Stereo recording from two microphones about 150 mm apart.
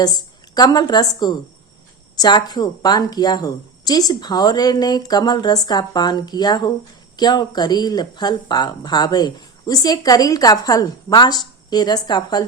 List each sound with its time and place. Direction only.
0.0 s speech: 25° left (ahead or behind)